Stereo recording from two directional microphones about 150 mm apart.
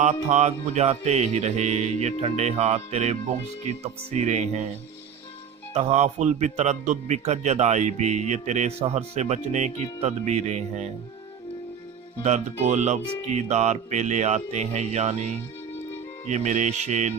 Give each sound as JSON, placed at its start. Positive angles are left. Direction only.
{"t": 0.0, "sound": "a man's voice", "side_deg": -50}
{"t": 5.7, "sound": "a man's voice", "side_deg": -45}
{"t": 12.2, "sound": "a man's voice", "side_deg": -50}
{"t": 16.3, "sound": "a man's voice", "side_deg": -50}